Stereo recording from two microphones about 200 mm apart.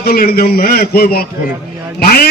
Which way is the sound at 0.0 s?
50° left (ahead or behind).